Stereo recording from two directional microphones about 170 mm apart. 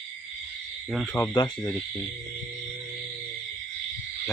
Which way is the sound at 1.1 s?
20° left (ahead or behind).